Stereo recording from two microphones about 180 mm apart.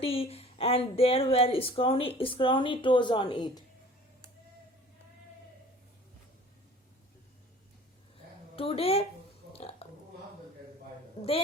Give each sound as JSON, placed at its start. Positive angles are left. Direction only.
{"t": 0.0, "sound": "speech", "side_deg": 30}
{"t": 8.5, "sound": "speech", "side_deg": 30}
{"t": 9.5, "sound": "a sound", "side_deg": 35}